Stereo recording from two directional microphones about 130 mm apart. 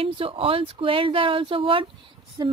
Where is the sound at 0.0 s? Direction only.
45° right (ahead or behind).